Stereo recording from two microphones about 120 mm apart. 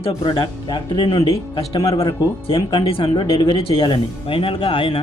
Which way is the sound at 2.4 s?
45° left (ahead or behind).